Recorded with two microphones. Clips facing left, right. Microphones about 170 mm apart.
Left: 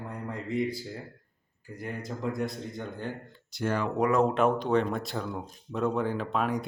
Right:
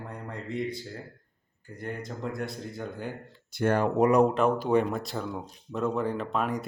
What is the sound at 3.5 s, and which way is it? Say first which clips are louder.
Speech: right 4 dB; 55° right (ahead or behind).